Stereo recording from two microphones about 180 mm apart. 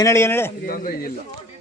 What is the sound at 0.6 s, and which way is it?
Speech, 50° left (ahead or behind).